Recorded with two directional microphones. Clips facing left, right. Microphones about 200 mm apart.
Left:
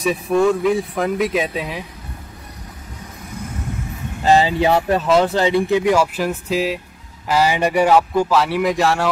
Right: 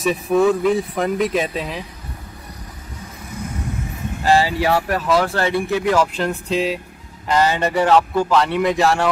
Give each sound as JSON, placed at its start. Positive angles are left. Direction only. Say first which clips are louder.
{"t": 0.0, "sound": "speech", "louder": "even", "side_deg": 0}
{"t": 4.2, "sound": "speech", "louder": "left 2 dB", "side_deg": 20}